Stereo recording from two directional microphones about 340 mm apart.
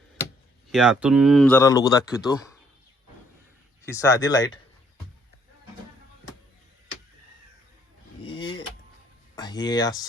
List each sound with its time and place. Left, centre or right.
0.7 s speech: centre
3.8 s speech: centre
8.2 s a sound: centre
9.3 s speech: centre